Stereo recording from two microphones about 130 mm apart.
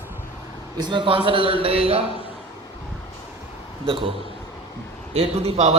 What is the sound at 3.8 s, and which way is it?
A man's voice, 45° right (ahead or behind).